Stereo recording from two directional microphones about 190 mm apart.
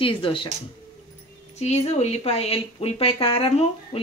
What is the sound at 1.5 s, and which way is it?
Speech, 35° left (ahead or behind).